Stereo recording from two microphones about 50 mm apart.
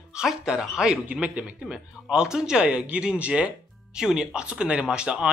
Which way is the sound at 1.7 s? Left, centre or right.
Centre.